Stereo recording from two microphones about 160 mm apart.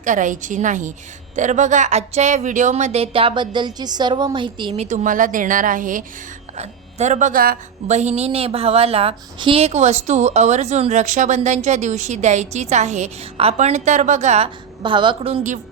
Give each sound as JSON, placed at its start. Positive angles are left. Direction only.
{"t": 0.0, "sound": "a woman's voice", "side_deg": -55}
{"t": 4.9, "sound": "a woman's voice", "side_deg": -55}
{"t": 7.9, "sound": "a woman's voice", "side_deg": -45}
{"t": 14.8, "sound": "speech", "side_deg": -30}